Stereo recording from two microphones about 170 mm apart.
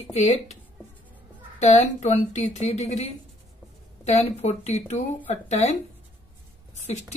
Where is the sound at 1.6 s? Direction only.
45° left (ahead or behind).